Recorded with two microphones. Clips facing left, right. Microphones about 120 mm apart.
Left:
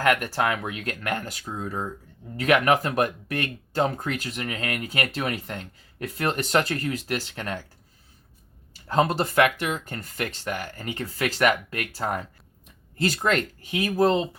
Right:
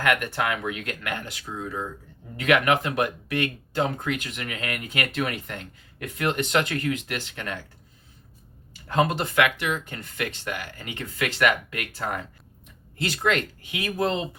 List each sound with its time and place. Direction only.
0.0 s speech: 35° left (ahead or behind)
8.9 s speech: 35° left (ahead or behind)